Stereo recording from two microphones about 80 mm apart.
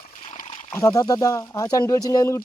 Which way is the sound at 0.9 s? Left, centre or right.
Left.